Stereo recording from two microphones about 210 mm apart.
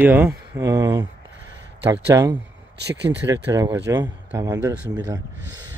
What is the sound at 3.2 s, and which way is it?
Speech, 15° right (ahead or behind).